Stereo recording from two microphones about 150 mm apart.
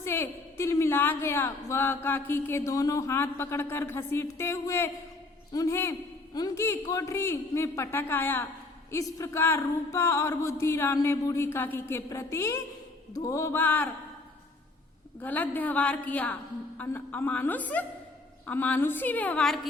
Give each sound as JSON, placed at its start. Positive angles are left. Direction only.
{"t": 0.0, "sound": "a woman's voice", "side_deg": 15}
{"t": 5.5, "sound": "a sound", "side_deg": 20}
{"t": 13.1, "sound": "a woman's voice", "side_deg": 20}
{"t": 15.2, "sound": "a woman's voice", "side_deg": 10}